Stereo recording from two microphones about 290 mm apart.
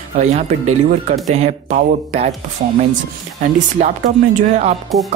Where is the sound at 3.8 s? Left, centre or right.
Right.